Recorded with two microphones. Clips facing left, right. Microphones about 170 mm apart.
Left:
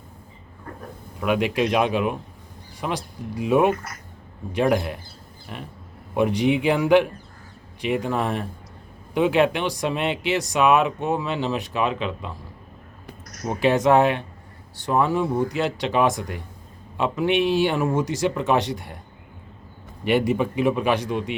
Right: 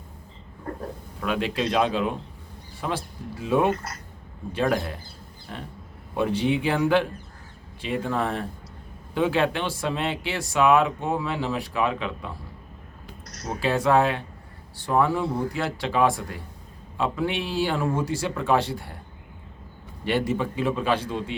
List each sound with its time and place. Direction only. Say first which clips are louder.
1.2 s a man's voice: left 4 dB; 15° left (ahead or behind)
6.1 s a man's voice: left 3 dB; 15° left (ahead or behind)
13.6 s speech: left 4 dB; 20° left (ahead or behind)
20.1 s a man's voice: left 4 dB; 15° left (ahead or behind)